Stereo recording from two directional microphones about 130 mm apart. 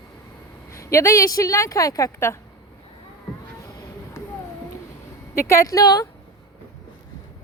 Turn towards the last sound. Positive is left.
turn(degrees=25)  # may be behind; listen again after turning